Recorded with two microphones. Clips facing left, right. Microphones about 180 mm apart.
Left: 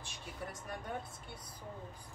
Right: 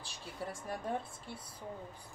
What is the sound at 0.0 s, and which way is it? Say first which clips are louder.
Vehicle: right 2 dB; 30° right (ahead or behind).